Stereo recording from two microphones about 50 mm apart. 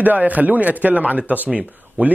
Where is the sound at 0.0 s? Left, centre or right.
Right.